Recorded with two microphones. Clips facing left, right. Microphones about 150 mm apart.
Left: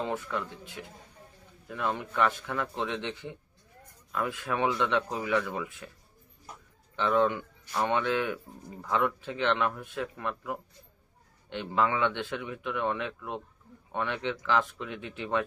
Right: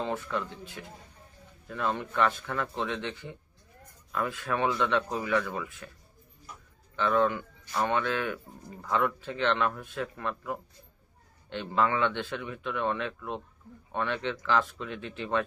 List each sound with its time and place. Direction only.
0.0 s speech: 10° left (ahead or behind)
6.9 s speech: 20° left (ahead or behind)